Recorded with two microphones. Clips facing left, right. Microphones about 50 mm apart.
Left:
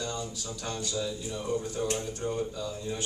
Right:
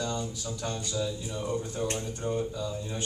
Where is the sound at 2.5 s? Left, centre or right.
Centre.